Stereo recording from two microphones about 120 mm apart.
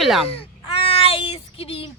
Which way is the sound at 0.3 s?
50° left (ahead or behind).